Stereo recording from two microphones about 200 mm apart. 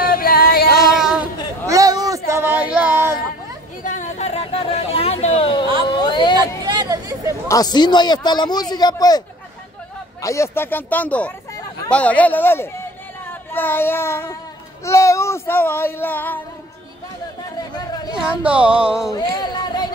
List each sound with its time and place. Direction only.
0.0 s music: 45° left (ahead or behind)
0.9 s a sound: 5° right (ahead or behind)
1.7 s a sound: 20° right (ahead or behind)
3.8 s a sound: 40° left (ahead or behind); by 6.3 s 20° left (ahead or behind)
6.6 s chatter: 20° right (ahead or behind)
7.4 s a man's voice: 20° left (ahead or behind)
10.2 s child singing: 15° left (ahead or behind)
13.3 s speech: 10° left (ahead or behind)
14.9 s child singing: 15° left (ahead or behind)
17.7 s a sound: 20° left (ahead or behind)
18.1 s speech: 5° right (ahead or behind)
19.1 s speech: 20° left (ahead or behind)